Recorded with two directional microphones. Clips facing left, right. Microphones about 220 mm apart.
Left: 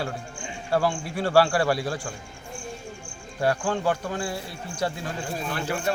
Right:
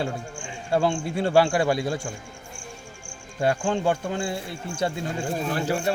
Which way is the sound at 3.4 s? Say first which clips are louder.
Right 1 dB; 20° right (ahead or behind).